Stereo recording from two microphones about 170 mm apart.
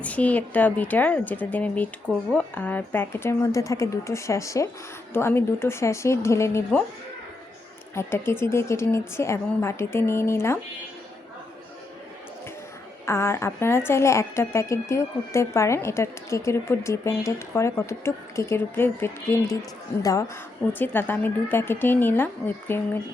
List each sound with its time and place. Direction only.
0.0 s speech: 10° left (ahead or behind)
7.9 s speech: 15° left (ahead or behind)
13.1 s a woman's voice: 15° left (ahead or behind)